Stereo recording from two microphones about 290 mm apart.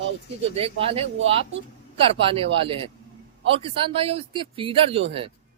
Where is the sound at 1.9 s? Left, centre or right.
Centre.